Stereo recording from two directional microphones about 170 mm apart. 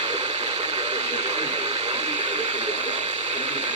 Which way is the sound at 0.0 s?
40° right (ahead or behind).